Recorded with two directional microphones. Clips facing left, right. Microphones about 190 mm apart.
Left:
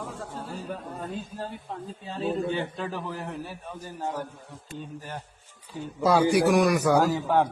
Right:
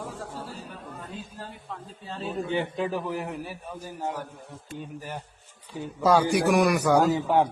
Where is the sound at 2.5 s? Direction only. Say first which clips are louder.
Right 3 dB; 15° right (ahead or behind).